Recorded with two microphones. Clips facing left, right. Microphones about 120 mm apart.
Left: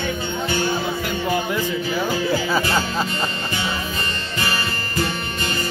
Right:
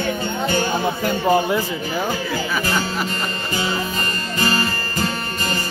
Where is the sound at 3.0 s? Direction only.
35° right (ahead or behind).